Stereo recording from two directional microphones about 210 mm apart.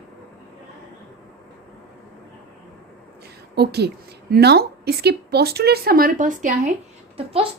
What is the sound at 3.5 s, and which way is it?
A woman's voice, 50° right (ahead or behind).